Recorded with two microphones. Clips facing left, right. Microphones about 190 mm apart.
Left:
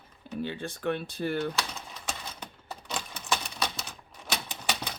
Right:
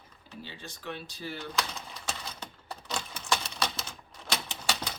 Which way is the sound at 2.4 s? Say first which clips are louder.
Even; 10° left (ahead or behind).